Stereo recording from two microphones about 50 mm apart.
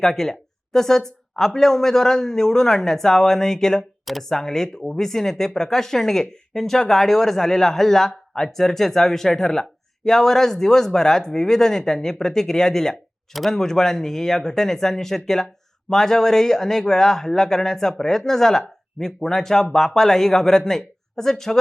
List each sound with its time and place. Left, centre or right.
0.0 s speech: centre